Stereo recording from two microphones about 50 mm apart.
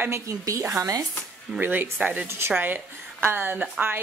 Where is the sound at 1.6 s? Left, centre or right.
Right.